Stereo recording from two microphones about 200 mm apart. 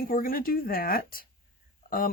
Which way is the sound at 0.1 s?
45° left (ahead or behind).